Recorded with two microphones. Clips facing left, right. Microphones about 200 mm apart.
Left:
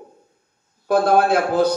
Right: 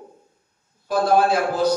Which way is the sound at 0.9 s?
60° left (ahead or behind).